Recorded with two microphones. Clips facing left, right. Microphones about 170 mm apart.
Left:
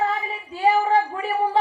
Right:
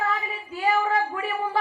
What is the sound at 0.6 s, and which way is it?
Female singing, 30° left (ahead or behind).